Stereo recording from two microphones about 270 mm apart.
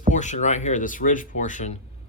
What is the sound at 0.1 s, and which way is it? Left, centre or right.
Speech, left.